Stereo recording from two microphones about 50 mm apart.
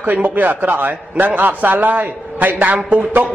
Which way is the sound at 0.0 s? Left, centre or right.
Right.